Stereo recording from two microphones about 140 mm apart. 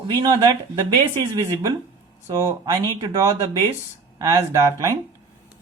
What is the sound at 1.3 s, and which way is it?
Speech, 25° right (ahead or behind).